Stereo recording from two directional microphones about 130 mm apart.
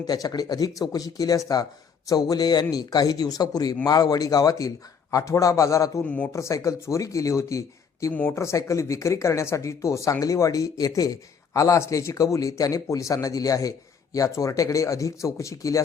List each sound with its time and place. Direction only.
0.1 s speech: 30° left (ahead or behind)
6.1 s speech: 10° left (ahead or behind)
6.3 s speech: 25° left (ahead or behind)
8.1 s speech: 10° left (ahead or behind)
8.4 s speech: 20° left (ahead or behind)